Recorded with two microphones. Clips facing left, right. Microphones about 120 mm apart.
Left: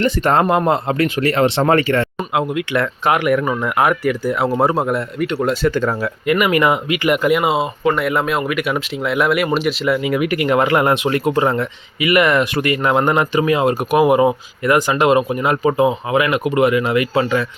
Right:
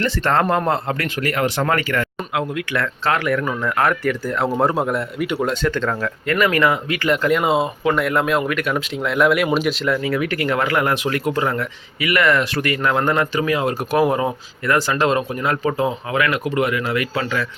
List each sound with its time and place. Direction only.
0.0 s speech: 20° left (ahead or behind)